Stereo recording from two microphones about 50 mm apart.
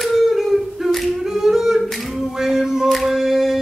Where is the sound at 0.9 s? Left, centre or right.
Centre.